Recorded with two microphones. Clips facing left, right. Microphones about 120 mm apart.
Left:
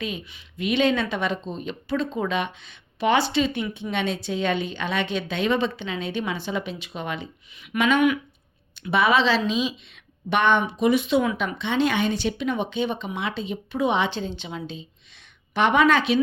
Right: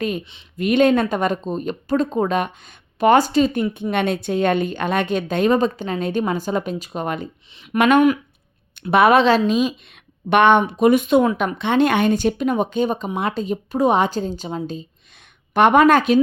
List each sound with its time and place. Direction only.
0.5 s speech: 50° right (ahead or behind)
7.5 s speech: 30° right (ahead or behind)
7.8 s a woman's voice: 55° right (ahead or behind)